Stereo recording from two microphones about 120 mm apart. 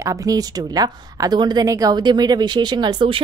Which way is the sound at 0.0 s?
30° right (ahead or behind).